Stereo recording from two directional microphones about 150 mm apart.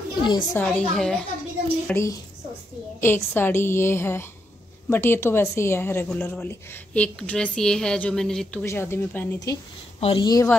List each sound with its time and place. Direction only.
0.2 s a woman's voice: 30° left (ahead or behind)
0.6 s a woman's voice: 5° left (ahead or behind)
1.9 s a woman's voice: 15° left (ahead or behind)
8.6 s a woman's voice: 15° left (ahead or behind)
9.9 s a woman's voice: 40° left (ahead or behind)
10.2 s a woman's voice: 25° left (ahead or behind)